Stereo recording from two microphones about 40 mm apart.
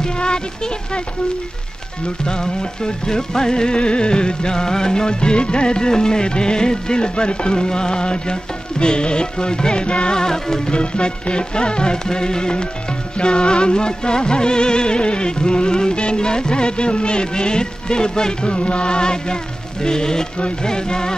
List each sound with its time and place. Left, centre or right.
0.0 s speech: left
2.2 s music: centre